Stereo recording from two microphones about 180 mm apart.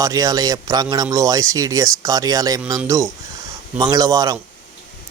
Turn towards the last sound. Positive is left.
turn(degrees=-20)  # may be behind; listen again after turning